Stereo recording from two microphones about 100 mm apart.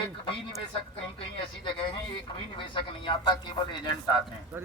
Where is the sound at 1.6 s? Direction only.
50° left (ahead or behind).